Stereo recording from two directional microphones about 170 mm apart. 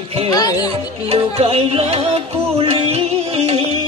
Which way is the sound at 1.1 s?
35° right (ahead or behind).